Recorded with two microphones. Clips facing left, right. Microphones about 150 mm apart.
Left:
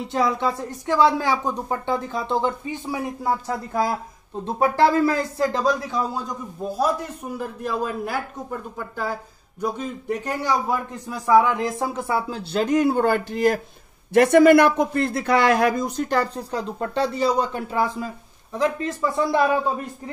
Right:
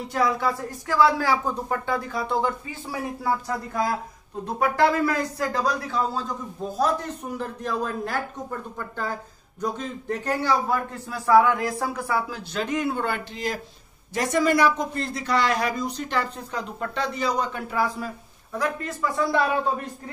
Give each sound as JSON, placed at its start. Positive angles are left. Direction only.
{"t": 0.1, "sound": "a man's voice", "side_deg": 25}
{"t": 14.1, "sound": "speech", "side_deg": 60}